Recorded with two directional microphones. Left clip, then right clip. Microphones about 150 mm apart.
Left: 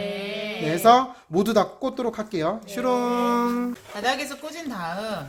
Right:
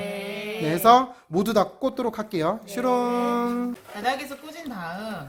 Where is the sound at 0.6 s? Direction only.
25° right (ahead or behind).